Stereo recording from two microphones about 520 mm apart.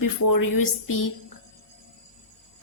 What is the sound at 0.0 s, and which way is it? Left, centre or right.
A woman's voice, left.